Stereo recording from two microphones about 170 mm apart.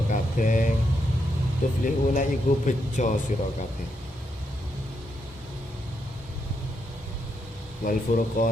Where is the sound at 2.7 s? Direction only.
45° left (ahead or behind).